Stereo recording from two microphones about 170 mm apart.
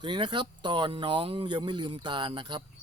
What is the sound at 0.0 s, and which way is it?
Speech, 30° right (ahead or behind).